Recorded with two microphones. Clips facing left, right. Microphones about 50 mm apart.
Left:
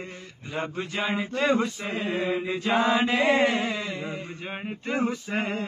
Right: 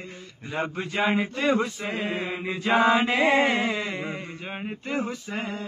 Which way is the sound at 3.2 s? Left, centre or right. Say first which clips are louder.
Right 1 dB; right.